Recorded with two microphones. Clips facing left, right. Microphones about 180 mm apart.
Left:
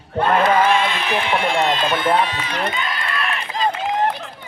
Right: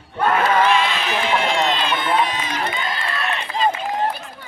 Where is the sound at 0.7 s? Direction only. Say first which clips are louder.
Left 1 dB; 55° left (ahead or behind).